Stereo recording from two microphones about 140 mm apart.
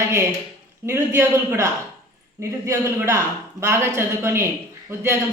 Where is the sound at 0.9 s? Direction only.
20° right (ahead or behind).